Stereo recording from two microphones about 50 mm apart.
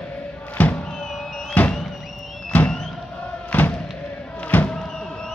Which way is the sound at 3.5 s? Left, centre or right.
Left.